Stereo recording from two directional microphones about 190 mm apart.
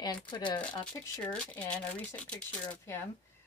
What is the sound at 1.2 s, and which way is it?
A woman's voice, 5° left (ahead or behind).